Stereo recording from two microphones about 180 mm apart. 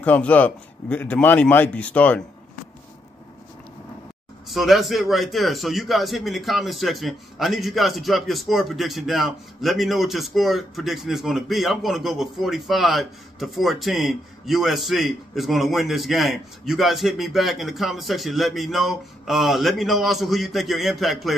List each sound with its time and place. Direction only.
0.0 s a man's voice: 10° left (ahead or behind)
4.5 s a man's voice: centre (ahead or behind)